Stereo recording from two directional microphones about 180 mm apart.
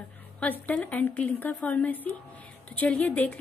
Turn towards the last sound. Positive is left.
turn(degrees=10)  # may be behind; listen again after turning